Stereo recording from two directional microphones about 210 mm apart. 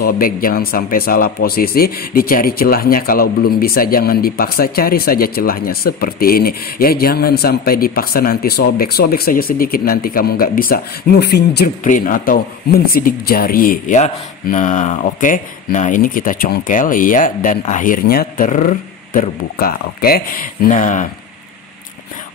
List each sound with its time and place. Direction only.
0.0 s speech: 40° left (ahead or behind)